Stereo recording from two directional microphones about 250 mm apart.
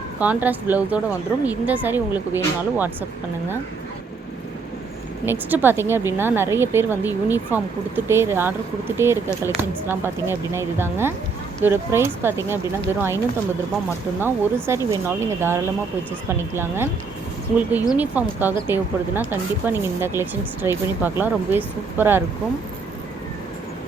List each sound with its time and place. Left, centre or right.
0.2 s a woman's voice: centre
5.2 s a woman's voice: centre
14.2 s a woman's voice: centre